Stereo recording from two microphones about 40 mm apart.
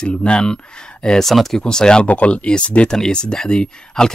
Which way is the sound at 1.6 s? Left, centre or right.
Centre.